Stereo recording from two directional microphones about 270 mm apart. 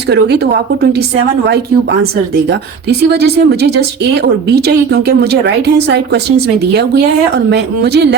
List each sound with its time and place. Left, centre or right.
0.1 s a woman's voice: right